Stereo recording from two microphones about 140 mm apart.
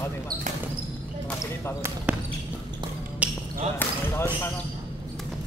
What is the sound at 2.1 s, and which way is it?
Basketball bounce, 10° right (ahead or behind).